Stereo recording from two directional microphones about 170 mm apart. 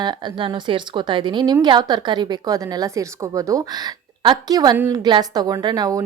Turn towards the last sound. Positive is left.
turn(degrees=-20)  # may be behind; listen again after turning